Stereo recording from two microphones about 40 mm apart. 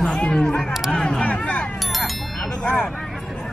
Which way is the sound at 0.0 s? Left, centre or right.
Left.